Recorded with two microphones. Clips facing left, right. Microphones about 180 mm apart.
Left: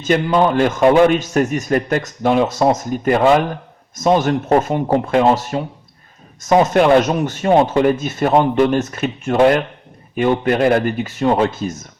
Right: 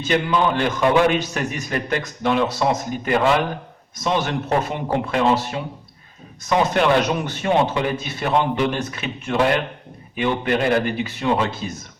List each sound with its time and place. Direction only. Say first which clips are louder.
0.0 s a man's voice: left 5 dB; 45° left (ahead or behind)